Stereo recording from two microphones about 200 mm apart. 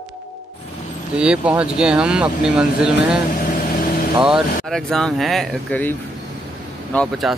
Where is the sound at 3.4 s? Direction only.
45° left (ahead or behind).